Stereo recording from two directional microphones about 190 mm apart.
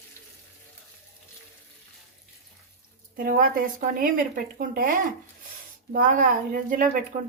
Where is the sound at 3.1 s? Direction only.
50° right (ahead or behind).